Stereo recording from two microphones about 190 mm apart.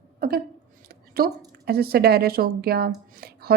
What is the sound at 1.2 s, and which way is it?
Speech, 50° right (ahead or behind).